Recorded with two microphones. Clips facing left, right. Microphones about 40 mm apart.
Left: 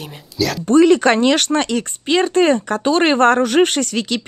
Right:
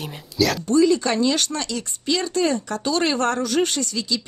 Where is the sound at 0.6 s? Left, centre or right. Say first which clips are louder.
Left 8 dB; left.